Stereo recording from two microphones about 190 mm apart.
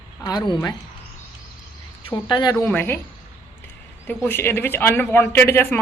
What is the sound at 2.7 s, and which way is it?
Speech, 10° left (ahead or behind).